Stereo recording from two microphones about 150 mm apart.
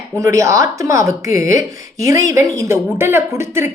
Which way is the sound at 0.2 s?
20° right (ahead or behind).